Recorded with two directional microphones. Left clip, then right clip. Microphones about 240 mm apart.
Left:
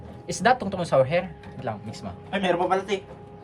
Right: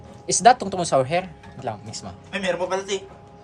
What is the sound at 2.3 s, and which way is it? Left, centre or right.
Speech, centre.